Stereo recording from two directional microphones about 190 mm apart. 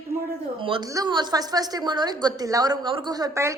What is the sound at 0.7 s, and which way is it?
A woman's voice, 25° right (ahead or behind).